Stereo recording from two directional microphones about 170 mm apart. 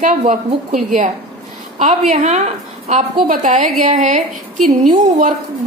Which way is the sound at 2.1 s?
45° right (ahead or behind).